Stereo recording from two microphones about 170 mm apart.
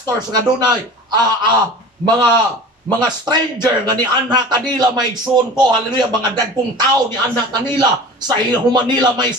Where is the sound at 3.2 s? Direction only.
25° right (ahead or behind).